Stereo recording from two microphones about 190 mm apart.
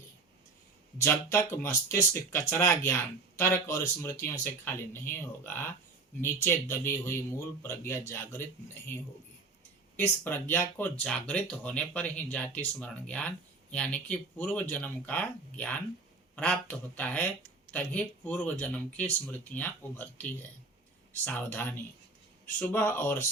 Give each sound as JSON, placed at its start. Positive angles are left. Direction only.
{"t": 0.9, "sound": "speech", "side_deg": 15}
{"t": 10.0, "sound": "speech", "side_deg": 10}
{"t": 21.2, "sound": "speech", "side_deg": 10}